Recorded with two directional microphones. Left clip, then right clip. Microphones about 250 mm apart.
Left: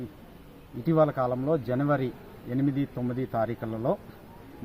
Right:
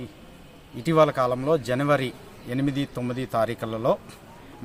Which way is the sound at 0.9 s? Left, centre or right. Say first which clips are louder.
Right 4 dB; right.